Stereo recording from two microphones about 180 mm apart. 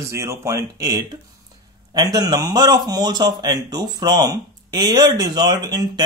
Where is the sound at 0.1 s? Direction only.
15° right (ahead or behind).